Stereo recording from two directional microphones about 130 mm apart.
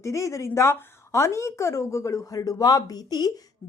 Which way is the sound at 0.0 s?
25° left (ahead or behind).